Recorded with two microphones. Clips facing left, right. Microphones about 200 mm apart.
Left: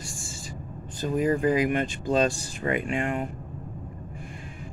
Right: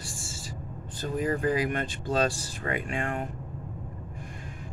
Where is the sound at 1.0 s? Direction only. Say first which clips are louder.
Left 4 dB; 20° left (ahead or behind).